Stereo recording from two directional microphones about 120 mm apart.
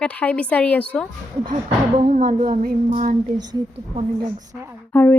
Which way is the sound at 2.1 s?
90° right.